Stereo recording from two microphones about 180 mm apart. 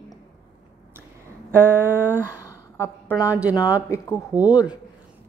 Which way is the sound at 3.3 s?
10° right (ahead or behind).